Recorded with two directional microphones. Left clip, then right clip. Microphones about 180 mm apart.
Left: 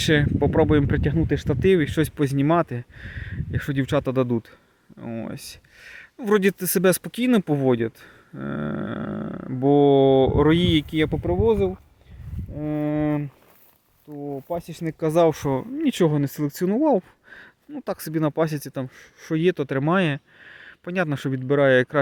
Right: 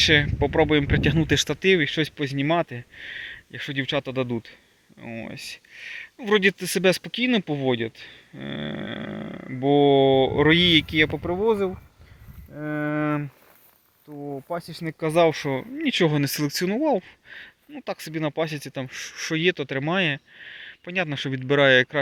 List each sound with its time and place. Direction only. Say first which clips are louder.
0.0 s speech: right 2 dB; 35° left (ahead or behind)
1.0 s speech: right 2 dB; 15° left (ahead or behind)
1.5 s speech: left 3 dB; 40° left (ahead or behind)
10.4 s speech: right 2 dB; 25° left (ahead or behind)
14.1 s speech: left 2 dB; 10° left (ahead or behind)
14.5 s speech: left 2 dB; 30° left (ahead or behind)
16.0 s speech: even; 20° left (ahead or behind); by 17.1 s 45° left (ahead or behind)
17.3 s a sound: right 3 dB; 45° left (ahead or behind)
17.7 s speech: left 3 dB; 45° left (ahead or behind)
18.9 s speech: right 12 dB; 20° left (ahead or behind)
19.3 s speech: left 2 dB; 40° left (ahead or behind)
21.2 s speech: right 1 dB; 25° left (ahead or behind)